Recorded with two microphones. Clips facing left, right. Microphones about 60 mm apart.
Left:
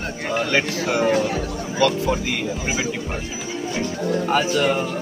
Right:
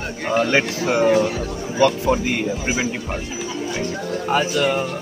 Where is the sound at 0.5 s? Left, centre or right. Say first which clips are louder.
Left 1 dB; right.